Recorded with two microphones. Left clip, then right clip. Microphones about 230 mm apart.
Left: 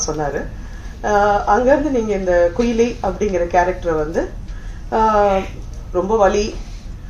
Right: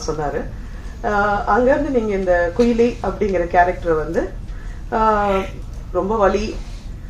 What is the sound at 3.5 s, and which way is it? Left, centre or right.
Speech, left.